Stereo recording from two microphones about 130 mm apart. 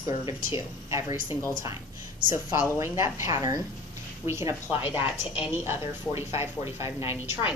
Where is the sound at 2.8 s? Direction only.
20° right (ahead or behind).